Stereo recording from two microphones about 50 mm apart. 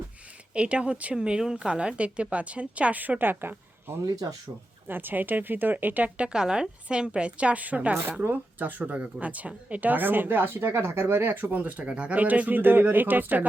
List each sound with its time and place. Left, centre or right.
0.5 s a woman's voice: right
6.1 s a woman's voice: centre; by 10.7 s right
10.7 s speech: right
11.2 s speech: right